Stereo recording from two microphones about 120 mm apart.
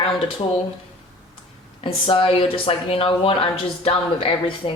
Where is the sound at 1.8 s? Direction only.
50° left (ahead or behind).